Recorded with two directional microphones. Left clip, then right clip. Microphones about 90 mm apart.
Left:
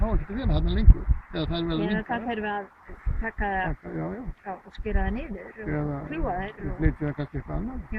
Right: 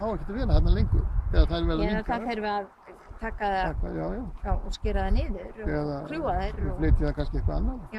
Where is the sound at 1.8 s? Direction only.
5° right (ahead or behind).